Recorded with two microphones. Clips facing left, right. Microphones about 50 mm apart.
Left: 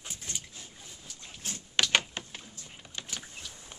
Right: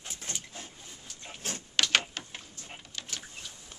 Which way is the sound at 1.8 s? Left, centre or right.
Left.